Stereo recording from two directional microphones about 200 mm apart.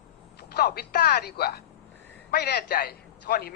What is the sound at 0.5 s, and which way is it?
Speech, 55° left (ahead or behind).